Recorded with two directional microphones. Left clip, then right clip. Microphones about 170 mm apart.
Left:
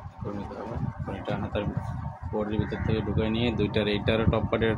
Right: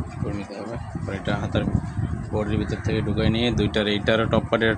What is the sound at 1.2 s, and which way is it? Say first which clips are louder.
Speech: right 5 dB; 45° right (ahead or behind).